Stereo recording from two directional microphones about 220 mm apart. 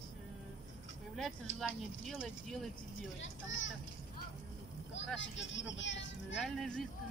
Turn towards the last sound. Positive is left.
turn(degrees=0)  # may be behind; listen again after turning